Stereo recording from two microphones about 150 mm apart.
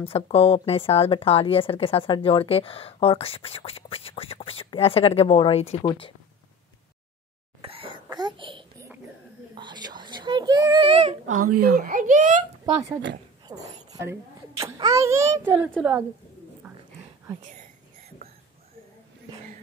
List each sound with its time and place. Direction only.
0.0 s a woman's voice: 40° left (ahead or behind)
7.6 s cough: 35° right (ahead or behind)
9.6 s a sound: 30° right (ahead or behind)
10.9 s speech: 40° right (ahead or behind)
11.2 s speech: 70° right (ahead or behind)
13.5 s a sound: 25° right (ahead or behind)
14.6 s a child's voice: 25° right (ahead or behind)